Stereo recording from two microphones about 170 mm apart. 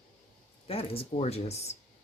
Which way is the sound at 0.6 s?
35° left (ahead or behind).